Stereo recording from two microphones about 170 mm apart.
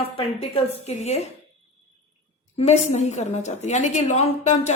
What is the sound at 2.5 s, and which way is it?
A woman's voice, 40° left (ahead or behind).